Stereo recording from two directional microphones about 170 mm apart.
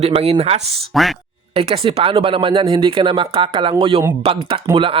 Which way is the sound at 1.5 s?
35° right (ahead or behind).